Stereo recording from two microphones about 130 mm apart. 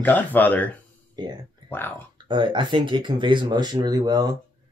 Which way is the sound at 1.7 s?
15° left (ahead or behind).